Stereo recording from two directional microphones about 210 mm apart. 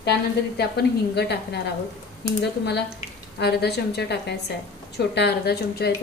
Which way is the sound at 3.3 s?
50° left (ahead or behind).